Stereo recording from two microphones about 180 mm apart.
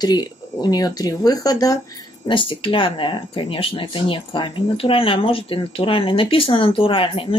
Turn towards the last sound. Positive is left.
turn(degrees=30)  # may be behind; listen again after turning